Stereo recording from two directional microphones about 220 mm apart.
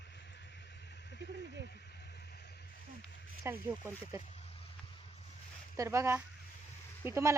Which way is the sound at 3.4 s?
10° right (ahead or behind).